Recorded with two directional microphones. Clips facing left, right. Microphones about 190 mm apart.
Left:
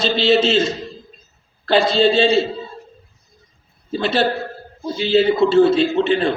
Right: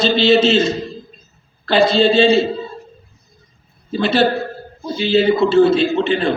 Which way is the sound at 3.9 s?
35° left (ahead or behind).